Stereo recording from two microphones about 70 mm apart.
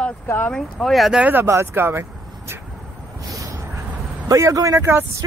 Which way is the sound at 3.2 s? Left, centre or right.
Right.